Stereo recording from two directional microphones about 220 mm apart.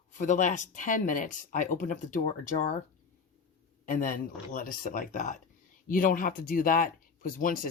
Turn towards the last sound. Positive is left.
turn(degrees=40)  # may be behind; listen again after turning